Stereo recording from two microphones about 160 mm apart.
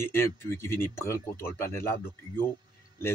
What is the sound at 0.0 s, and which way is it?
Speech, 15° left (ahead or behind).